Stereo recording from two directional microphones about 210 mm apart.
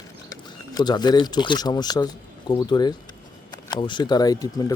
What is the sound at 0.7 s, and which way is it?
Speech, 20° left (ahead or behind).